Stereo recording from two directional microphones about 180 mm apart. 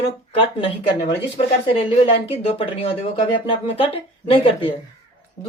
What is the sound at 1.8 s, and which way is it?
Speech, 35° left (ahead or behind).